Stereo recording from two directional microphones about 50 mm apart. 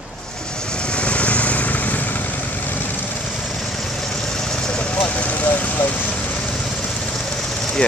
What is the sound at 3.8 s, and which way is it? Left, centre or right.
Vehicle, centre.